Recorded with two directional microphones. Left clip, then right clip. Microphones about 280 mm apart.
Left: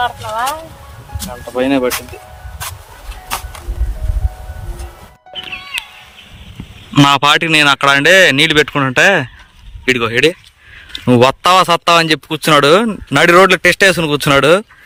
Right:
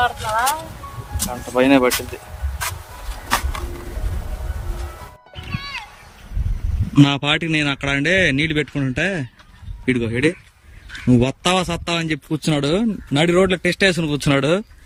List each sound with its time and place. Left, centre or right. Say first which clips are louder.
1.5 s speech: even; centre
3.2 s a sound: right 2 dB; left
6.9 s speech: left 8 dB; centre